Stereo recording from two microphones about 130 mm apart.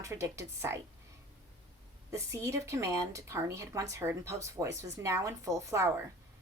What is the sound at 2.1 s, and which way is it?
Speech, 20° right (ahead or behind).